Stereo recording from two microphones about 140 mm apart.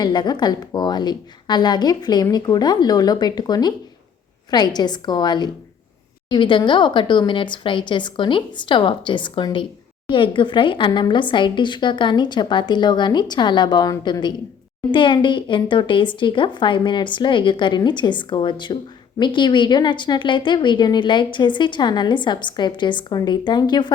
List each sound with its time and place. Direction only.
0.0 s a woman's voice: 30° left (ahead or behind)